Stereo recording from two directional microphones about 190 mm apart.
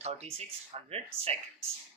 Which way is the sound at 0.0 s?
35° right (ahead or behind).